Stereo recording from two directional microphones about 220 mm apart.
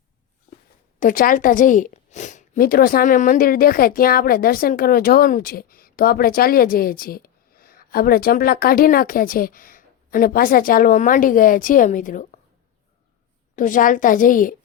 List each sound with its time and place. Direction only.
0.9 s a woman's voice: 40° left (ahead or behind)
13.6 s a woman's voice: 35° left (ahead or behind)